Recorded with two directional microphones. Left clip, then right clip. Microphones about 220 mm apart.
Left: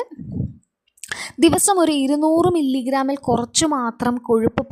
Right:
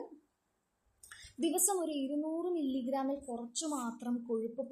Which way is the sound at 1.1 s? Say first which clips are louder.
Left 19 dB; 50° left (ahead or behind).